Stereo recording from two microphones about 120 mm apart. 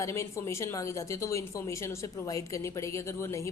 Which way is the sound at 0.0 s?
25° left (ahead or behind).